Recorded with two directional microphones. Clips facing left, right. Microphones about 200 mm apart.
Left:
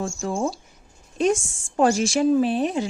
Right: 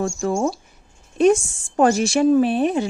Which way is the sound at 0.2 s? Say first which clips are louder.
Right 4 dB; 60° right (ahead or behind).